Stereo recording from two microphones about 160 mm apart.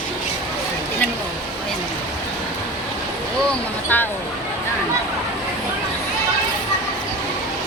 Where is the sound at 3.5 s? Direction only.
10° left (ahead or behind).